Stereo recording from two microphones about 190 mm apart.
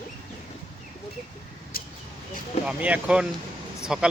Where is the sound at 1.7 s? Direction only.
50° left (ahead or behind).